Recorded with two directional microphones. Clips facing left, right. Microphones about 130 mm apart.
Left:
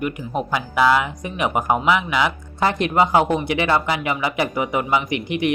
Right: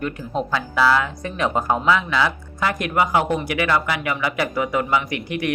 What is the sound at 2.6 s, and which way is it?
Speech, 25° left (ahead or behind).